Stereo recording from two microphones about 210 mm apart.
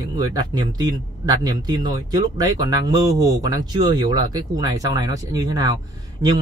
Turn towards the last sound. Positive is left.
turn(degrees=-20)  # may be behind; listen again after turning